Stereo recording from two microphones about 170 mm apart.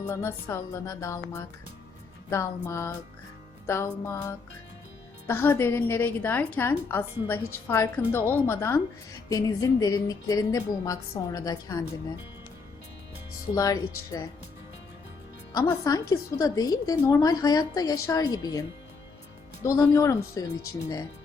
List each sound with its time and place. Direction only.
0.1 s a woman's voice: 15° left (ahead or behind)
13.6 s a woman's voice: 20° left (ahead or behind)
15.5 s a woman's voice: 20° left (ahead or behind)
19.6 s a woman's voice: 20° left (ahead or behind)